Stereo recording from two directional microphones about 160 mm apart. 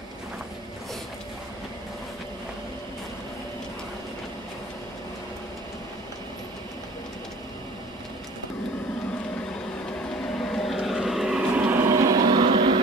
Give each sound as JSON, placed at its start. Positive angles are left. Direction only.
{"t": 10.3, "sound": "vehicle", "side_deg": 5}
{"t": 12.3, "sound": "vehicle", "side_deg": -25}